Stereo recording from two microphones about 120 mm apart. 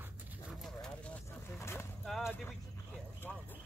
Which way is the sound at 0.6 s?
5° left (ahead or behind).